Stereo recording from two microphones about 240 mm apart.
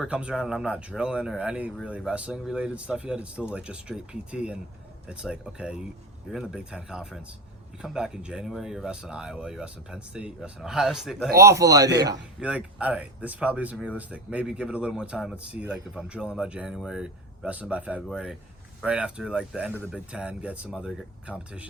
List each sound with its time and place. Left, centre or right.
0.0 s speech: centre
11.3 s speech: centre
12.4 s speech: centre
19.7 s speech: centre
20.1 s speech: centre